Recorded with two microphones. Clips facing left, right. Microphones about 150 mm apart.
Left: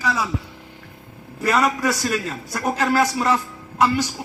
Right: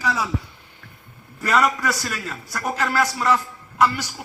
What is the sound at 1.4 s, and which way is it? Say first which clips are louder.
A man's voice: left 1 dB; 15° left (ahead or behind).